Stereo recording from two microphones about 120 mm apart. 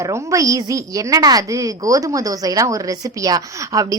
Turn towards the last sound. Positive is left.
turn(degrees=-30)  # may be behind; listen again after turning